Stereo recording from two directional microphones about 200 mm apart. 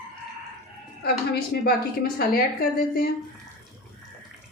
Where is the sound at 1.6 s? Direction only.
50° left (ahead or behind).